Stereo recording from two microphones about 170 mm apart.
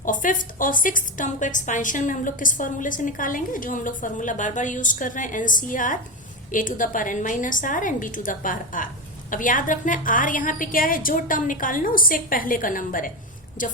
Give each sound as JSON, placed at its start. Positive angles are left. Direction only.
{"t": 0.0, "sound": "a woman's voice", "side_deg": 50}